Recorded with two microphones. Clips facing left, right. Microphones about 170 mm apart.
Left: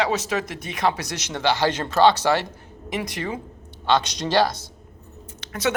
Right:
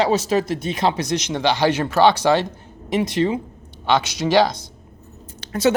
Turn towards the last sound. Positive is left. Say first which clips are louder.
# right 6 dB
turn(degrees=-30)  # may be behind; listen again after turning